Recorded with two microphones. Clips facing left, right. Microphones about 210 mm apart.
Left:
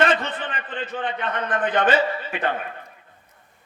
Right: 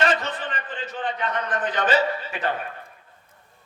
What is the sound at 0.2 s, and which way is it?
A man's voice, 55° left (ahead or behind).